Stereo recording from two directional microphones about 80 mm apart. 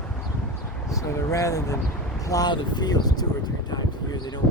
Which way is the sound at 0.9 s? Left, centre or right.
Left.